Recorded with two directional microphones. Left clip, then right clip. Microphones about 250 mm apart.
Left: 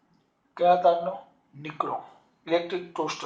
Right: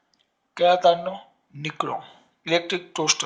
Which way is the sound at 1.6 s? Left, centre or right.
Right.